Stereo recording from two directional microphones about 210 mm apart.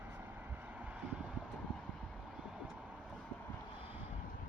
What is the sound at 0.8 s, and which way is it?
Vehicle, 5° right (ahead or behind).